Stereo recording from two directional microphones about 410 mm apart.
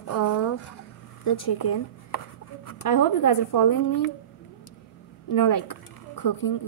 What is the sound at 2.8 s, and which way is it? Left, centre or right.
Speech, left.